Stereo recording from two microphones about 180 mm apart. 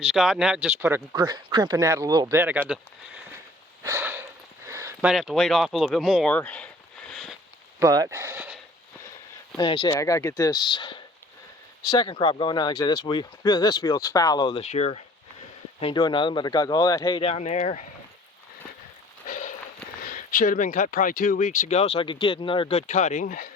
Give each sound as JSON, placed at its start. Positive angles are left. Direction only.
{"t": 0.0, "sound": "speech", "side_deg": 0}
{"t": 3.8, "sound": "a sound", "side_deg": -15}
{"t": 5.0, "sound": "speech", "side_deg": 0}
{"t": 7.8, "sound": "speech", "side_deg": -15}
{"t": 9.6, "sound": "speech", "side_deg": 25}
{"t": 19.3, "sound": "a sound", "side_deg": 45}
{"t": 20.1, "sound": "speech", "side_deg": 50}
{"t": 22.9, "sound": "speech", "side_deg": 40}